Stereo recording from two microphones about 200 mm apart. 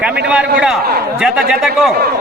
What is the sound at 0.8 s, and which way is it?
Speech, 50° right (ahead or behind).